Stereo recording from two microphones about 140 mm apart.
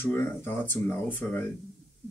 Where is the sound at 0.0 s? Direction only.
15° left (ahead or behind).